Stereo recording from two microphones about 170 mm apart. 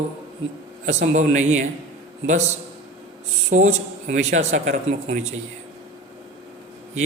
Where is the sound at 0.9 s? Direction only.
45° right (ahead or behind).